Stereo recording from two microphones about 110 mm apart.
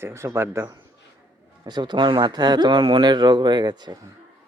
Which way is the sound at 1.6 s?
40° right (ahead or behind).